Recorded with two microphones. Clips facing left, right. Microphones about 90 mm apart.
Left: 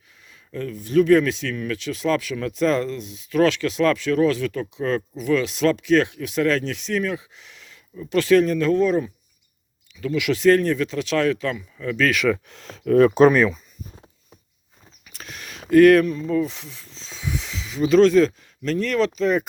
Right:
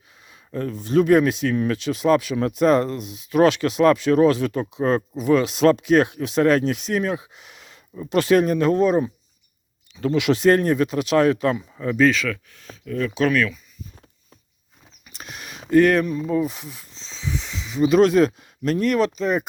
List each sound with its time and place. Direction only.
0.6 s speech: 25° right (ahead or behind)
4.8 s speech: 30° right (ahead or behind)
5.1 s speech: 20° right (ahead or behind)
12.1 s speech: 15° left (ahead or behind)
12.5 s speech: 75° left (ahead or behind); by 13.2 s 50° left (ahead or behind)
13.2 s speech: 35° left (ahead or behind)
15.0 s a sound: 10° right (ahead or behind)
16.4 s speech: 5° right (ahead or behind)
17.0 s snake: 5° left (ahead or behind)
17.9 s speech: 15° right (ahead or behind)